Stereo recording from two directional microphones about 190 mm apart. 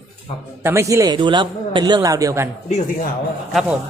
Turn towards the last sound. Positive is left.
turn(degrees=0)  # may be behind; listen again after turning